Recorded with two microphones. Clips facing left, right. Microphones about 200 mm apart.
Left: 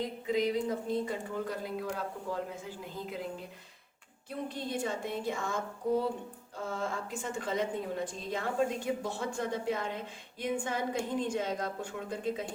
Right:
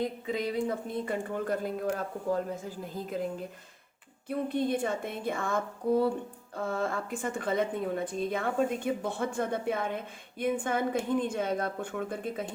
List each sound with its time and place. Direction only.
0.5 s speech: 60° right (ahead or behind)
4.3 s a woman's voice: 55° right (ahead or behind)